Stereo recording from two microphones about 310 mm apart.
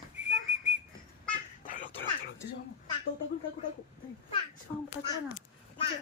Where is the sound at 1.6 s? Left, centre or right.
Left.